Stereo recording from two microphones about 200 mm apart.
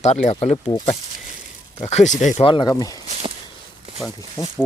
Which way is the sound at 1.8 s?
35° left (ahead or behind).